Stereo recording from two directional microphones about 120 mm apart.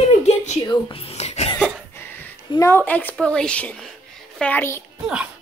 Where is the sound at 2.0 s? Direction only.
15° left (ahead or behind).